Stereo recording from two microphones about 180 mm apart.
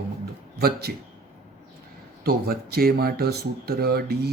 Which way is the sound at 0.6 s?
60° right (ahead or behind).